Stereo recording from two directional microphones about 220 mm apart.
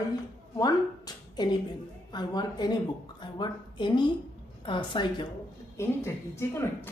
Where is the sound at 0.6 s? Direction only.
20° left (ahead or behind).